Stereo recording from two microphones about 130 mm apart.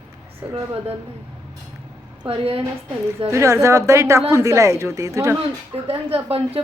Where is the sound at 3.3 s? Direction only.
25° right (ahead or behind).